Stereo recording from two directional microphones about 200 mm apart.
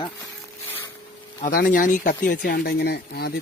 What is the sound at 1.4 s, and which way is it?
Speech, 45° left (ahead or behind).